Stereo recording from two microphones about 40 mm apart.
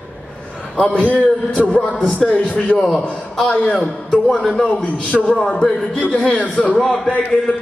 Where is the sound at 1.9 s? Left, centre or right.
Left.